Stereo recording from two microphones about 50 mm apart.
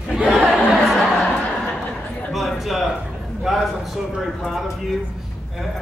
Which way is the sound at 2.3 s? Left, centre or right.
Centre.